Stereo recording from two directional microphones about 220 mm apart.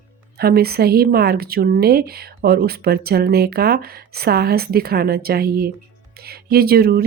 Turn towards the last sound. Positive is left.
turn(degrees=-45)  # may be behind; listen again after turning